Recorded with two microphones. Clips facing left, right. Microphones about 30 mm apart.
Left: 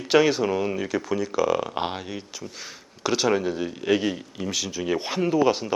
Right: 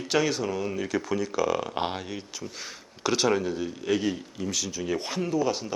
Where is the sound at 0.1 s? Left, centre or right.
Centre.